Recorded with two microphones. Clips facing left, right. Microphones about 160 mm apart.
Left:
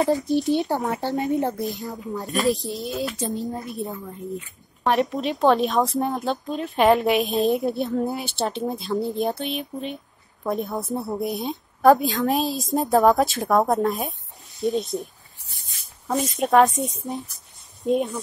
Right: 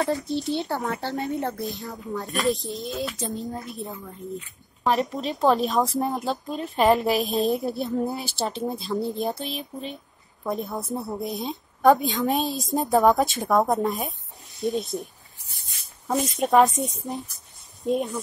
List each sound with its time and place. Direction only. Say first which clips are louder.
0.0 s speech: left 5 dB; 20° left (ahead or behind)
2.2 s a woman's voice: left 3 dB; centre (ahead or behind)
16.1 s a woman's voice: left 1 dB; centre (ahead or behind)